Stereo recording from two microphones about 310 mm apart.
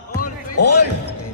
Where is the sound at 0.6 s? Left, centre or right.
Left.